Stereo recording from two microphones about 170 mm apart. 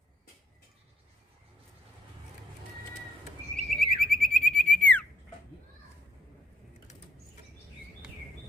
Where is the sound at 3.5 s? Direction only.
5° left (ahead or behind).